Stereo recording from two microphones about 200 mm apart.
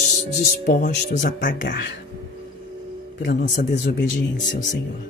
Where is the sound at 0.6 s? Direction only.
45° left (ahead or behind).